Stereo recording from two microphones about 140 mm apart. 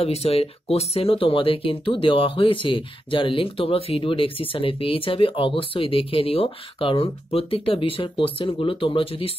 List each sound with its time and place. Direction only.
0.0 s speech: 45° left (ahead or behind)